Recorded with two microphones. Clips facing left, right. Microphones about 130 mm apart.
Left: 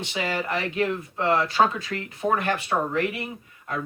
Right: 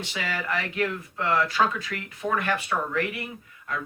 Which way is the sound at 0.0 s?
25° left (ahead or behind).